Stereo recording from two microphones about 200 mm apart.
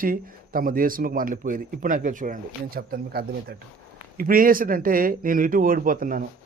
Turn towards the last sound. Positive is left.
turn(degrees=-45)  # may be behind; listen again after turning